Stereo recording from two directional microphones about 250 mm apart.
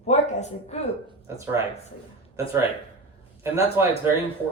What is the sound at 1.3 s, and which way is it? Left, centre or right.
Speech, centre.